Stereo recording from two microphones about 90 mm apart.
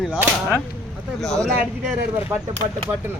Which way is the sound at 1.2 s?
5° left (ahead or behind).